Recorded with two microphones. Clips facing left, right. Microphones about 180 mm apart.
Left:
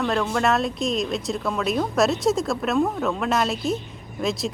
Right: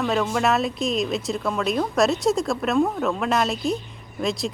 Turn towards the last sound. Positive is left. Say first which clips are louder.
# even
turn(degrees=0)  # may be behind; listen again after turning